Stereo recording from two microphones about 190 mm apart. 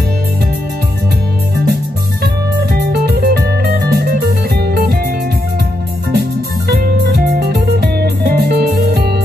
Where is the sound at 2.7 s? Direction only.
55° right (ahead or behind).